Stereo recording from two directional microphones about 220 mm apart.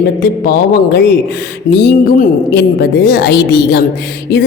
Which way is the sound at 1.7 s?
45° left (ahead or behind).